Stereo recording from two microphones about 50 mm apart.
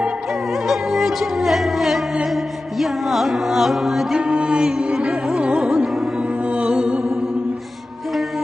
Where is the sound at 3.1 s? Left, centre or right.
Centre.